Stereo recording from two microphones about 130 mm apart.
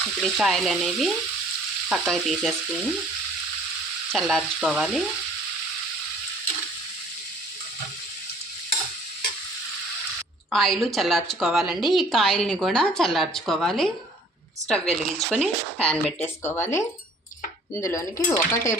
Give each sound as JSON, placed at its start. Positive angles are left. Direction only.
{"t": 0.2, "sound": "a woman's voice", "side_deg": 0}
{"t": 4.1, "sound": "a woman's voice", "side_deg": 0}
{"t": 10.5, "sound": "a woman's voice", "side_deg": 0}